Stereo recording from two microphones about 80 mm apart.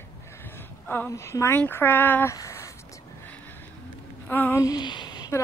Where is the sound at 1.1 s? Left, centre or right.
Left.